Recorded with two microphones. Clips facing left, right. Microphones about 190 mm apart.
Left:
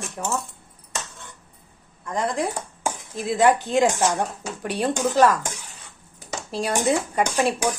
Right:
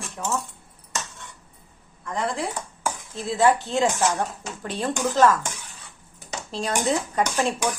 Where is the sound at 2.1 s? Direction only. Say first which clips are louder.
Left 3 dB; 15° left (ahead or behind).